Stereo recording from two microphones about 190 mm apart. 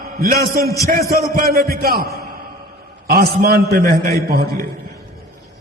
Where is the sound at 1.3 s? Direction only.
50° right (ahead or behind).